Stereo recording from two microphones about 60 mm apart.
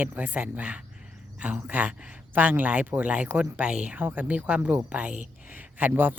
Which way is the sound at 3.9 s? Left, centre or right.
Right.